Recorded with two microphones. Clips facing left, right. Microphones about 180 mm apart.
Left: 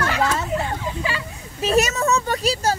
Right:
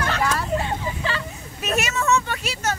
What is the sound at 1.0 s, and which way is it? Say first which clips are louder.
Speech: even; 10° left (ahead or behind).